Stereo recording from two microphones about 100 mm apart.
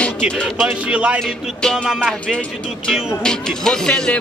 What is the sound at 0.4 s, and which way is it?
Music, 5° left (ahead or behind).